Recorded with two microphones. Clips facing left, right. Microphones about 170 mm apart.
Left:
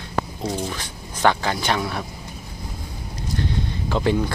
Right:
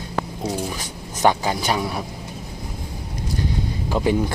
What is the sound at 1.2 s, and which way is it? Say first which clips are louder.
Speech: right 1 dB; 15° right (ahead or behind).